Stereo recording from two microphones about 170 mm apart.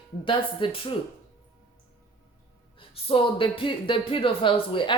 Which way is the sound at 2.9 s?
30° left (ahead or behind).